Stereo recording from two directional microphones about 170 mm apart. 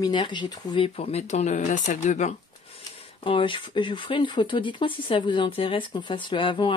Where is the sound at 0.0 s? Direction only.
25° left (ahead or behind); by 2.3 s 45° left (ahead or behind).